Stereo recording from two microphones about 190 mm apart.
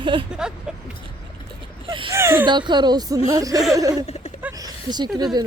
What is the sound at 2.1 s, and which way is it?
Speech, 15° right (ahead or behind).